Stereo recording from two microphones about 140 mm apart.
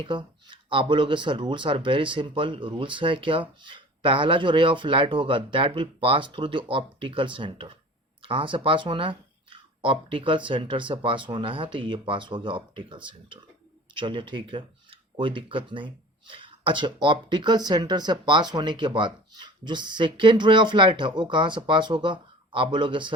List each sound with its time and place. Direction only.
0.0 s speech: 35° right (ahead or behind)